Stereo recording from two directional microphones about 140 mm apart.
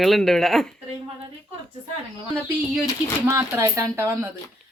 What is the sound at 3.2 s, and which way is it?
Speech, 20° right (ahead or behind).